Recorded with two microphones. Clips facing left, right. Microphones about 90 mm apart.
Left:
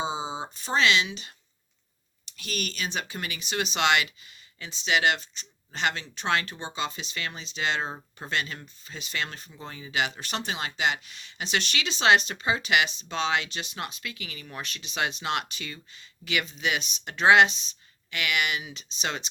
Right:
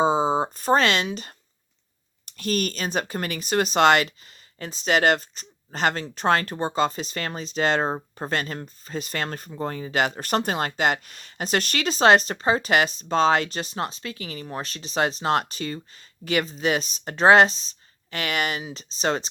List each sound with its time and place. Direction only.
0.0 s speech: 50° right (ahead or behind)